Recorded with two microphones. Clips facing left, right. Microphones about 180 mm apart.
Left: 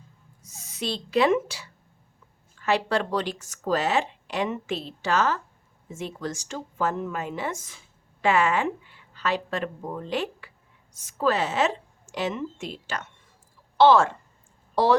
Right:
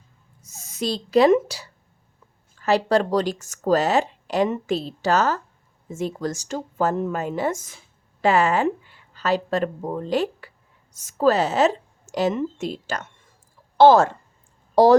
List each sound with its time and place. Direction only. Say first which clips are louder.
0.4 s speech: right 5 dB; 45° right (ahead or behind)